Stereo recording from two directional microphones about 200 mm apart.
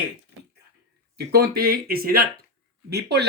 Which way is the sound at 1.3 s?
50° right (ahead or behind).